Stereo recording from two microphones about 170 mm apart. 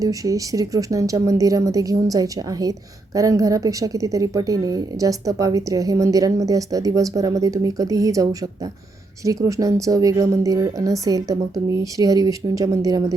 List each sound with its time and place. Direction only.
0.0 s a woman's voice: 20° right (ahead or behind)